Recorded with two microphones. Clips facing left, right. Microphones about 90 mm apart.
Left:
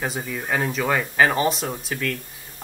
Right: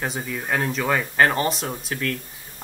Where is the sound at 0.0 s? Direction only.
Centre (ahead or behind).